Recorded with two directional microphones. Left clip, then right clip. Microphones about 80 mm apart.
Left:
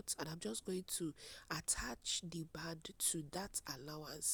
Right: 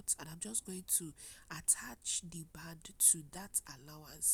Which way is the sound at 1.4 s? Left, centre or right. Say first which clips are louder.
Right 1 dB; left.